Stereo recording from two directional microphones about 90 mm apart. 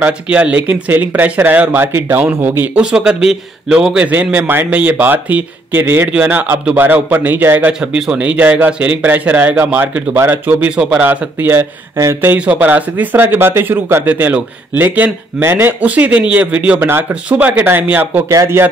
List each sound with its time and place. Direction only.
0.0 s speech: 15° right (ahead or behind)
2.8 s speech: 10° right (ahead or behind); by 12.4 s 30° right (ahead or behind)
12.4 s speech: 15° right (ahead or behind)
18.3 s speech: 35° right (ahead or behind)